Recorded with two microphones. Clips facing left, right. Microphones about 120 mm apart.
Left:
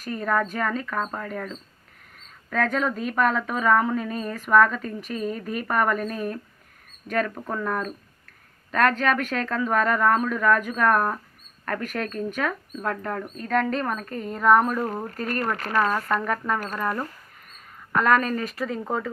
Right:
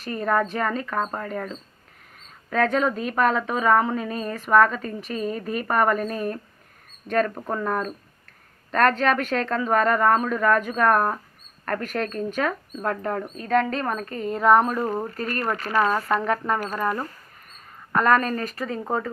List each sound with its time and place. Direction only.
0.0 s a woman's voice: centre (ahead or behind)
7.3 s a woman's voice: 15° right (ahead or behind)
15.9 s a woman's voice: 15° right (ahead or behind)